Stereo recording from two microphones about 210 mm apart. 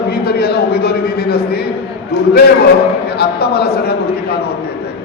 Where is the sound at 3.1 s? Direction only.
50° left (ahead or behind).